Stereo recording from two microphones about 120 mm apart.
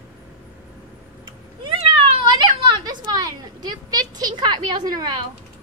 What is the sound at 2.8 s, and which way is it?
Speech, 35° right (ahead or behind).